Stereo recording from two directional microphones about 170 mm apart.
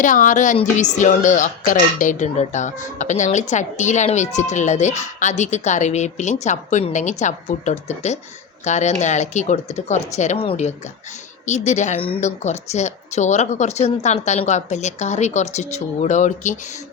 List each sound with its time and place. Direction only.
0.0 s a woman's voice: 50° left (ahead or behind)